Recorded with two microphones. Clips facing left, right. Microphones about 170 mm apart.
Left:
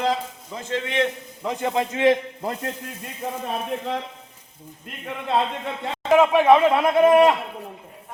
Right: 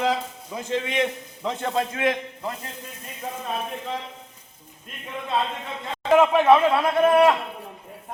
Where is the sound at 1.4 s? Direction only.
10° left (ahead or behind).